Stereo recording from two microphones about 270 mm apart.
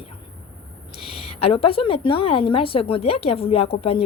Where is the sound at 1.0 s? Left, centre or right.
Left.